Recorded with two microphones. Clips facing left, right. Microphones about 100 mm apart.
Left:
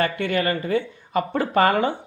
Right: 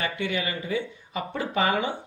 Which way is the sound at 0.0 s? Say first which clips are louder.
Left 6 dB; 55° left (ahead or behind).